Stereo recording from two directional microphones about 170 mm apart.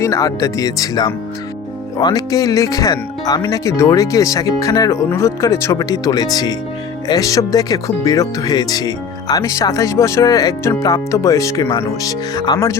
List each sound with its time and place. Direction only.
0.0 s speech: 20° left (ahead or behind)